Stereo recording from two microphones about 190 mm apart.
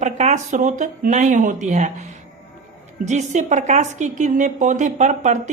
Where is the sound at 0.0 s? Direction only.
40° right (ahead or behind).